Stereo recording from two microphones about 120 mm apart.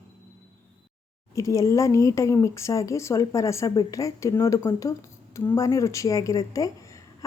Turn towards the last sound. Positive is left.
turn(degrees=25)  # may be behind; listen again after turning